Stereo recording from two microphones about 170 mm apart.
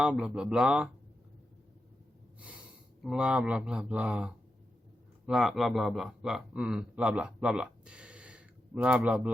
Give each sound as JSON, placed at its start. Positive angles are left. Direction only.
{"t": 0.0, "sound": "speech", "side_deg": -5}
{"t": 3.0, "sound": "speech", "side_deg": -5}